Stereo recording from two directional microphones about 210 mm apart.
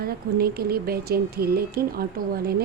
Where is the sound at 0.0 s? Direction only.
45° right (ahead or behind).